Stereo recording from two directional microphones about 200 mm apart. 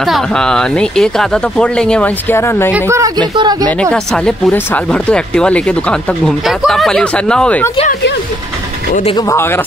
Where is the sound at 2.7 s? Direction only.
15° right (ahead or behind).